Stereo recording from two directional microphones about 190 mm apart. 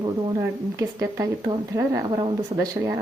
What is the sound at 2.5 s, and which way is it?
Speech, 30° right (ahead or behind).